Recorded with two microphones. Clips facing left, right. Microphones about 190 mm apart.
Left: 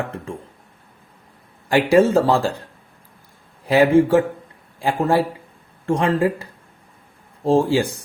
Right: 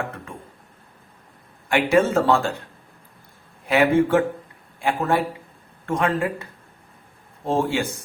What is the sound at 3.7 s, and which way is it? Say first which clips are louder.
Speech: left 4 dB; 35° left (ahead or behind).